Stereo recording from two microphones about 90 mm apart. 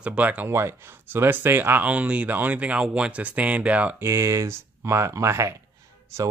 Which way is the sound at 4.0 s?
35° right (ahead or behind).